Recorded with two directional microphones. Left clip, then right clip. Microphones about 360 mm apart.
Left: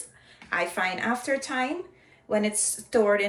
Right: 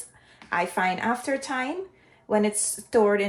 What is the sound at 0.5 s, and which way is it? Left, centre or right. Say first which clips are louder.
Speech: right 2 dB; right.